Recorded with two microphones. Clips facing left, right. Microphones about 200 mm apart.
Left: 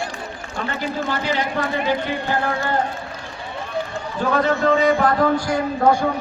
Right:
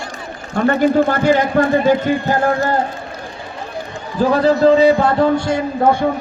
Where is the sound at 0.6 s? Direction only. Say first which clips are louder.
Right 12 dB; 55° right (ahead or behind).